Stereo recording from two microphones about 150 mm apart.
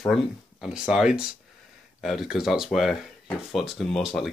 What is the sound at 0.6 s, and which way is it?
Speech, 5° right (ahead or behind).